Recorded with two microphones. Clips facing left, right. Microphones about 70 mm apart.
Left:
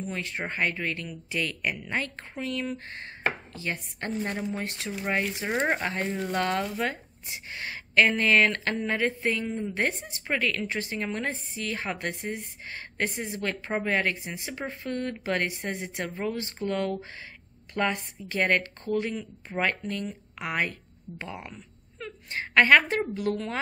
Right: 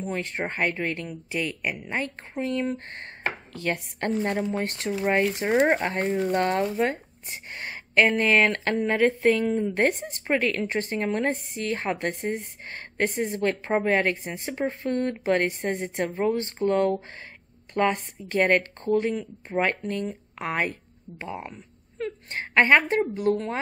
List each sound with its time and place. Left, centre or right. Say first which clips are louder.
0.0 s speech: right 4 dB; right
3.5 s chopping: right 5 dB; right
4.2 s speech: right 4 dB; right
4.6 s speech: right 6 dB; right
10.2 s speech: right 4 dB; right
12.2 s speech: right 5 dB; right
13.4 s speech: right 5 dB; right
17.7 s a woman's voice: right 4 dB; right
21.9 s whimper: right 4 dB; right
22.5 s a woman's voice: even; right